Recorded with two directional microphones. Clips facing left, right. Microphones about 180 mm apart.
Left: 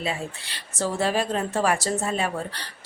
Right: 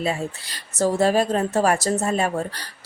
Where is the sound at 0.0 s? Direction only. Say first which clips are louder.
Right 5 dB; 40° right (ahead or behind).